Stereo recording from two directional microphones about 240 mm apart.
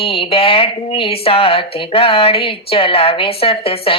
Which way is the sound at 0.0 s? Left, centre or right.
Left.